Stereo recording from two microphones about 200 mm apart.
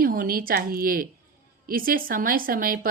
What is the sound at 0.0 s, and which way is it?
A woman's voice, 45° right (ahead or behind).